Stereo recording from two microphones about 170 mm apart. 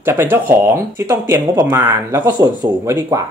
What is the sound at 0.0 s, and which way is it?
Speech, 15° right (ahead or behind).